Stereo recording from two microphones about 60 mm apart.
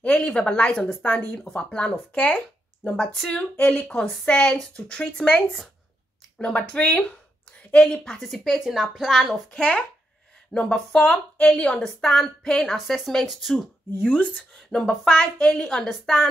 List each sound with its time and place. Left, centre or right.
0.0 s speech: centre
4.0 s a woman's voice: centre
8.2 s a woman's voice: centre
9.5 s a woman's voice: centre
14.0 s a woman's voice: left